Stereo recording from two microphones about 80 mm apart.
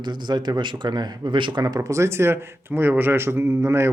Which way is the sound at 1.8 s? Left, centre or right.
Right.